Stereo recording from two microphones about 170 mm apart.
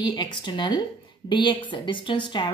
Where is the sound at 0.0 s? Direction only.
25° left (ahead or behind).